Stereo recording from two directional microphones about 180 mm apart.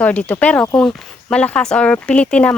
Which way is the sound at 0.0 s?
10° left (ahead or behind).